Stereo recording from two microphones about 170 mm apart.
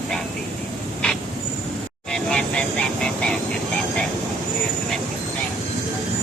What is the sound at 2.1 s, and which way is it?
Vehicle, 5° left (ahead or behind).